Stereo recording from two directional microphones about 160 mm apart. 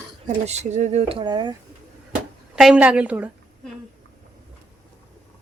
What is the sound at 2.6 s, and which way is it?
Speech, 5° right (ahead or behind).